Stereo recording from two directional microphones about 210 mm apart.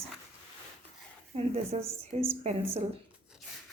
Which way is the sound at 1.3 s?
30° right (ahead or behind).